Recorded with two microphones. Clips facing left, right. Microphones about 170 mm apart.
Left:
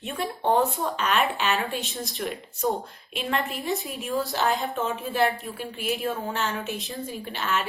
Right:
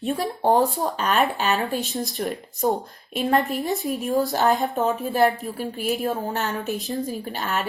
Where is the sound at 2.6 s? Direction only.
45° right (ahead or behind).